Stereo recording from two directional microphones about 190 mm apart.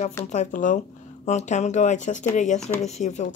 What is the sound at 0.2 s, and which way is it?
Speech, 40° left (ahead or behind).